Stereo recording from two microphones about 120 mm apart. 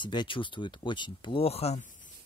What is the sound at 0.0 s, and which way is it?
Speech, 40° left (ahead or behind).